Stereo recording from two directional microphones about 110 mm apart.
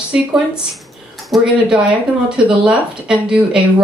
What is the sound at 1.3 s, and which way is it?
Speech, 10° right (ahead or behind).